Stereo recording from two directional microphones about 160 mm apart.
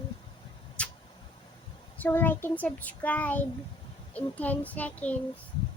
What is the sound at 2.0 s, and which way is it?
A child's voice, 10° left (ahead or behind).